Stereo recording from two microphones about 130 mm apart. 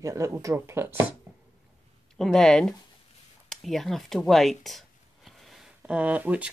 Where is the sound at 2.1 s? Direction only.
5° left (ahead or behind).